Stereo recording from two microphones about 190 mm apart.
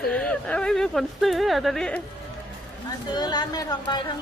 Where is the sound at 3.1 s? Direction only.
20° left (ahead or behind).